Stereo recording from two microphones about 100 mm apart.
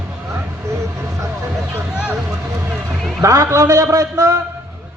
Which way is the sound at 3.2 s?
35° right (ahead or behind).